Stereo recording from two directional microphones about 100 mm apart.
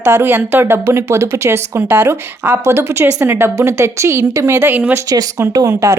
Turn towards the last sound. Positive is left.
turn(degrees=-30)  # may be behind; listen again after turning